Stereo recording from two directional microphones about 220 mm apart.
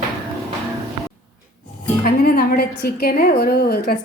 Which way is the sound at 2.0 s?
45° left (ahead or behind).